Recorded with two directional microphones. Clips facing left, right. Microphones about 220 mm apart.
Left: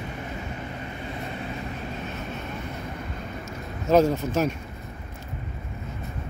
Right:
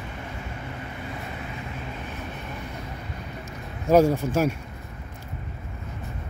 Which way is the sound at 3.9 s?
10° right (ahead or behind).